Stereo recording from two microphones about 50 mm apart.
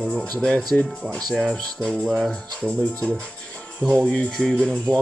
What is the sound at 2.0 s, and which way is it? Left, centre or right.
Speech, centre.